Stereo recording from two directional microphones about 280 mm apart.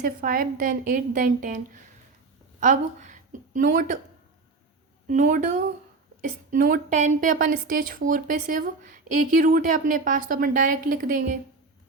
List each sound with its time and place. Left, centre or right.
0.0 s a woman's voice: right
5.0 s speech: right